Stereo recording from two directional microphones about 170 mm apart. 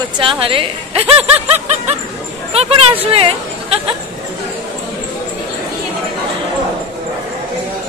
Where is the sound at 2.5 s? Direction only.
35° right (ahead or behind).